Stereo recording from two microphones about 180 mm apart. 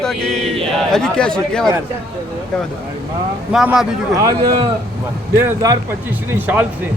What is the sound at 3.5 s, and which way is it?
Speech, 5° right (ahead or behind).